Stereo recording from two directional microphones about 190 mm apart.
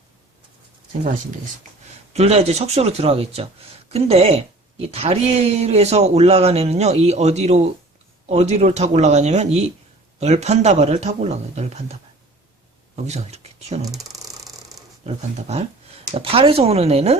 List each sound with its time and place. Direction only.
2.1 s speech: 35° right (ahead or behind)
13.1 s speech: 35° right (ahead or behind)
14.1 s a sound: 20° right (ahead or behind)
15.0 s speech: 35° right (ahead or behind)